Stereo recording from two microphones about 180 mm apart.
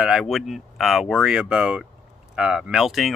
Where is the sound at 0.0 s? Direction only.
5° right (ahead or behind).